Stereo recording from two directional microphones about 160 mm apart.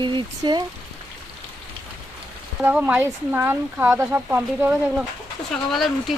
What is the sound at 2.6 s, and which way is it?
Speech, 10° right (ahead or behind).